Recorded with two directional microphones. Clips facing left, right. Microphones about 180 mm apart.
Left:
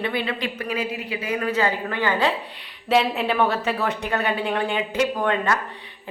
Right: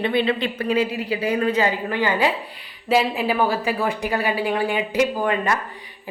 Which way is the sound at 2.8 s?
5° right (ahead or behind).